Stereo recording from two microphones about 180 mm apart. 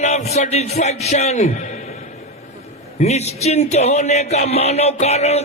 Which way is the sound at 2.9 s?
35° left (ahead or behind).